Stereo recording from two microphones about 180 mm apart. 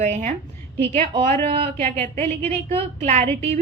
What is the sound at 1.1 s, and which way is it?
Speech, 25° right (ahead or behind).